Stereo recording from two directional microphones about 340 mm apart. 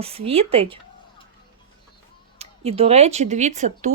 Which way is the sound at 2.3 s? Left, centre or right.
Centre.